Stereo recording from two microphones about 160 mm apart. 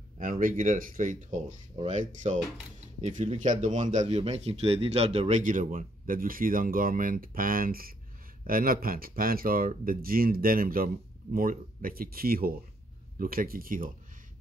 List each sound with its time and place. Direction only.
0.2 s speech: 55° right (ahead or behind)